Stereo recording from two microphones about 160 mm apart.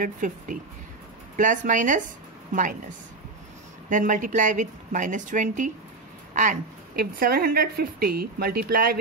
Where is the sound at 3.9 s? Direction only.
55° right (ahead or behind).